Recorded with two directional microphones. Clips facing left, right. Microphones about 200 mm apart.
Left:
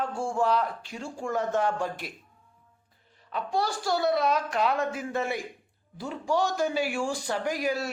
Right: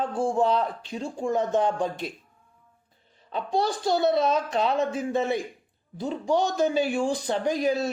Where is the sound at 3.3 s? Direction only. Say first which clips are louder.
Right 3 dB; 25° right (ahead or behind).